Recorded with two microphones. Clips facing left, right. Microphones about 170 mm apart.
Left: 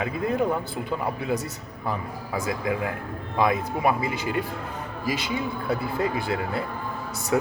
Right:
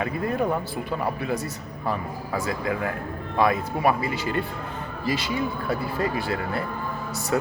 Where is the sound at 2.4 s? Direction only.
15° left (ahead or behind).